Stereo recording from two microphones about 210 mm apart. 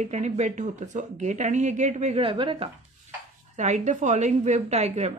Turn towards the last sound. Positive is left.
turn(degrees=-30)  # may be behind; listen again after turning